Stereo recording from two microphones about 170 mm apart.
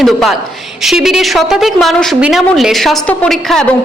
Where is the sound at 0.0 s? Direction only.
Centre (ahead or behind).